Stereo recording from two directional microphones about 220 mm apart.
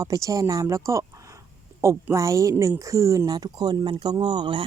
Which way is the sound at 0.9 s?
15° right (ahead or behind).